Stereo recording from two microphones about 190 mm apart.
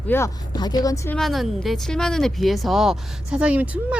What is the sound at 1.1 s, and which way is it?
Speech, centre (ahead or behind).